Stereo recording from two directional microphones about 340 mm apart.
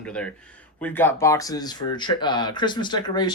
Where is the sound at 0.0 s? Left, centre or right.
Centre.